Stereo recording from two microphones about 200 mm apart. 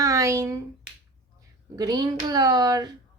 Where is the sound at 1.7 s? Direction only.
20° right (ahead or behind).